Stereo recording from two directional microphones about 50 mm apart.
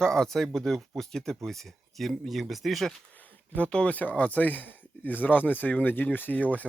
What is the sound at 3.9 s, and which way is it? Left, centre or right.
Speech, left.